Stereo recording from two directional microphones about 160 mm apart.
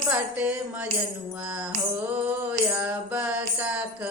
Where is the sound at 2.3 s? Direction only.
10° right (ahead or behind).